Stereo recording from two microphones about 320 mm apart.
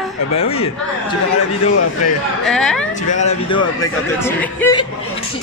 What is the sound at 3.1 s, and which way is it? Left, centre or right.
Speech, centre.